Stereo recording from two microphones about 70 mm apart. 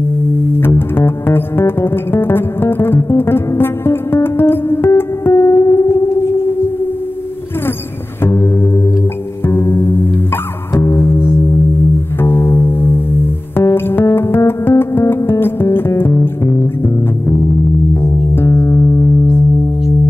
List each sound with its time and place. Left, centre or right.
0.2 s music: left
5.3 s music: left
8.2 s music: left
9.5 s music: left
18.0 s music: left